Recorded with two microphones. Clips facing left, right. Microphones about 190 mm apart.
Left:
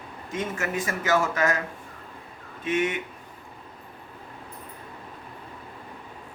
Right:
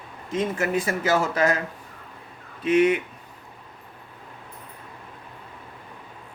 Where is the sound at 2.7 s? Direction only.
35° right (ahead or behind).